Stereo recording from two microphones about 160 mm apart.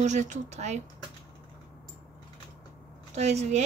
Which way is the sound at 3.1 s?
45° right (ahead or behind).